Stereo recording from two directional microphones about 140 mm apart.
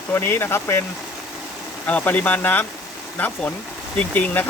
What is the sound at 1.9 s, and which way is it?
Speech, 10° left (ahead or behind).